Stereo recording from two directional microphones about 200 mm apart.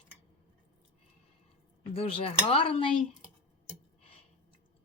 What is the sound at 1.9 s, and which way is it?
Speech, 30° left (ahead or behind).